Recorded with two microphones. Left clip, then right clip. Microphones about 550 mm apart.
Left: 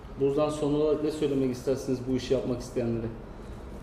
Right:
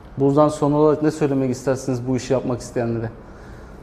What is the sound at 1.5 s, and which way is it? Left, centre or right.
Speech, right.